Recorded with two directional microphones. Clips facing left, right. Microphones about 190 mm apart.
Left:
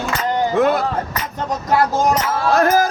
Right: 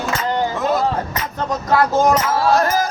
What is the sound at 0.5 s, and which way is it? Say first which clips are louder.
Music: left 4 dB; 65° left (ahead or behind).